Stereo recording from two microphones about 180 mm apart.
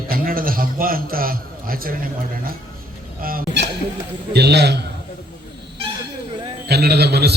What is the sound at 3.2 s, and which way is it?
Speech, 55° right (ahead or behind).